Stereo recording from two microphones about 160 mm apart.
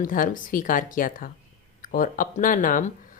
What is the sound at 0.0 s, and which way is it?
A woman's voice, 55° left (ahead or behind).